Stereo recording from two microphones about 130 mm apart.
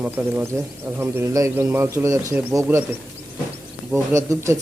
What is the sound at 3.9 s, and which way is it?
Speech, 25° right (ahead or behind).